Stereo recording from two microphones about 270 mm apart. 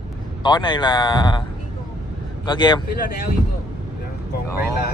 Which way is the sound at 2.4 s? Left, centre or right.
Centre.